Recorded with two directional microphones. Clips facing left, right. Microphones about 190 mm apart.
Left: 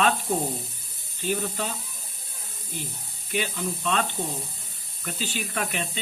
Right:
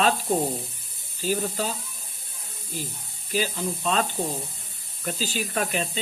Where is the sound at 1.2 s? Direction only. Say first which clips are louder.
Right 2 dB; 35° right (ahead or behind).